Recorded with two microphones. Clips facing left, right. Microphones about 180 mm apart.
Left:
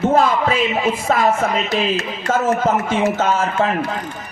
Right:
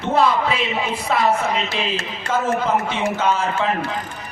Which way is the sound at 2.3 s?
45° left (ahead or behind).